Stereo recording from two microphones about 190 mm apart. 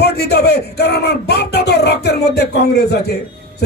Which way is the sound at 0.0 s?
60° left (ahead or behind).